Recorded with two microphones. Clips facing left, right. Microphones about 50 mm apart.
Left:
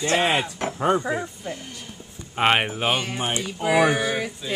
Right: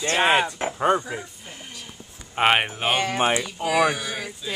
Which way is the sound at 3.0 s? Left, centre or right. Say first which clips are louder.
Right 6 dB; right.